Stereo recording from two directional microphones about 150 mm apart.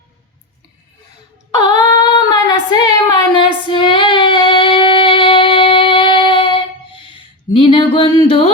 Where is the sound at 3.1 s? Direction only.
30° left (ahead or behind).